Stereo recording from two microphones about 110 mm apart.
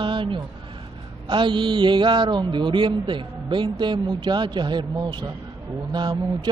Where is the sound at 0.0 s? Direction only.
50° right (ahead or behind).